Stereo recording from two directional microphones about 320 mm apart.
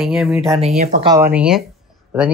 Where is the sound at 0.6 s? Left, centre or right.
Centre.